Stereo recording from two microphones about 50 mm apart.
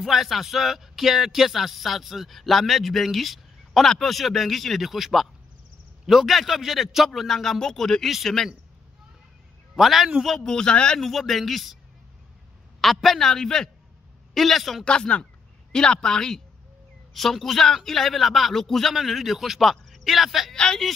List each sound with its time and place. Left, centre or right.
0.0 s speech: centre
7.2 s speech: centre
9.8 s speech: centre
10.2 s speech: centre
11.0 s speech: centre
12.8 s speech: centre
14.9 s speech: left; by 20.5 s centre
20.5 s speech: centre